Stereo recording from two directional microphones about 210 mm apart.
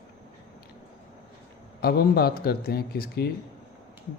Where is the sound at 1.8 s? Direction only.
45° left (ahead or behind).